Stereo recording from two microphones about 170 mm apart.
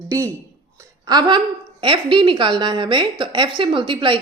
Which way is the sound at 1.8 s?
30° right (ahead or behind).